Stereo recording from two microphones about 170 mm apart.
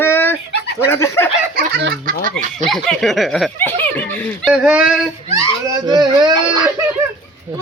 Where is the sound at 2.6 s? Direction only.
Centre (ahead or behind).